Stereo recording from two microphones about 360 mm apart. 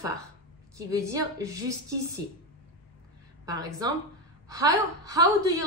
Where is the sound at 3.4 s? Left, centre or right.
Centre.